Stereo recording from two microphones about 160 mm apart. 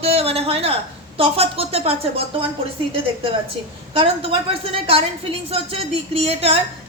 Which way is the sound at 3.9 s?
35° right (ahead or behind).